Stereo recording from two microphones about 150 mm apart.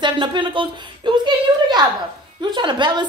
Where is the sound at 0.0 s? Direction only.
35° right (ahead or behind).